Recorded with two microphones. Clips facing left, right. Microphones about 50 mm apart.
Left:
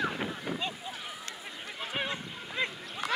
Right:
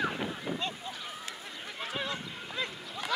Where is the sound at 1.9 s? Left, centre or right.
Left.